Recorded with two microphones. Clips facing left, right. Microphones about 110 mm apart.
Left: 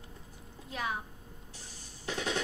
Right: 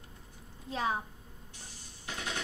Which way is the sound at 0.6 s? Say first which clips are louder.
Right 4 dB; 30° right (ahead or behind).